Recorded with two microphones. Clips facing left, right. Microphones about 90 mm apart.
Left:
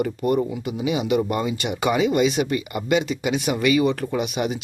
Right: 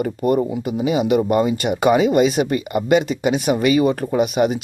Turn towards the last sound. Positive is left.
turn(degrees=-40)  # may be behind; listen again after turning